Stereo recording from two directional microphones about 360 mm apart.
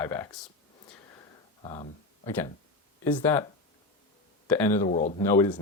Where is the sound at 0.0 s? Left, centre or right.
Centre.